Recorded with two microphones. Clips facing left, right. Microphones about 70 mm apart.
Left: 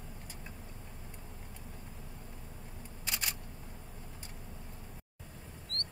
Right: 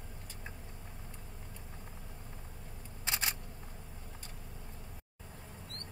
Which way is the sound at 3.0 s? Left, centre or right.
Right.